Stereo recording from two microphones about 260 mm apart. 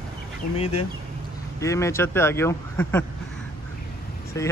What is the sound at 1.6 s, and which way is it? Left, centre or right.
Speech, centre.